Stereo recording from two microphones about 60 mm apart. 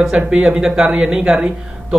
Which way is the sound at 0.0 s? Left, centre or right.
Centre.